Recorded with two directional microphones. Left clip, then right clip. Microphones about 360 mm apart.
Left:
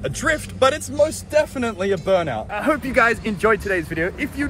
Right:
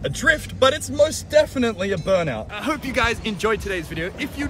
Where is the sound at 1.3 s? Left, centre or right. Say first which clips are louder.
Right 2 dB; left.